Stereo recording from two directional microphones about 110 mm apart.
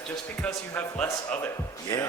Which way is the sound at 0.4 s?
15° left (ahead or behind).